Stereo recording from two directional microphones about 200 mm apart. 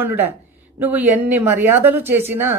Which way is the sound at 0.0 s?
10° right (ahead or behind).